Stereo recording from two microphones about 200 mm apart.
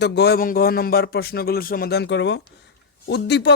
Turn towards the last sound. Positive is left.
turn(degrees=55)  # may be behind; listen again after turning